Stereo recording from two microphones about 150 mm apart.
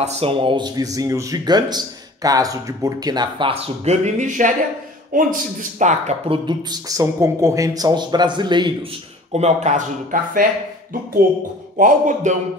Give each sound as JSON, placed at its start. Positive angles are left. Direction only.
{"t": 0.0, "sound": "a man's voice", "side_deg": -40}
{"t": 9.3, "sound": "speech", "side_deg": -50}
{"t": 11.8, "sound": "speech", "side_deg": -55}